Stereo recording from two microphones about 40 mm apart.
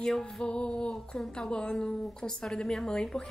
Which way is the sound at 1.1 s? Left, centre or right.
Centre.